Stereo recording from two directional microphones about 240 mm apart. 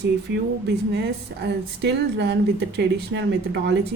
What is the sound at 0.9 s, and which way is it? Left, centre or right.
A woman's voice, right.